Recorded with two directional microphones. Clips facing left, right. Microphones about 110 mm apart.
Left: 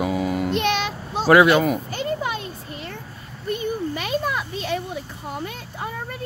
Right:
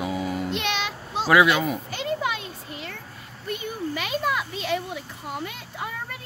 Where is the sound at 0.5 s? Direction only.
45° left (ahead or behind).